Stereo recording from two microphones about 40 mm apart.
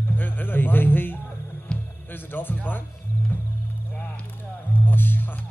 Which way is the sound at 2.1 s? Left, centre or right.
Left.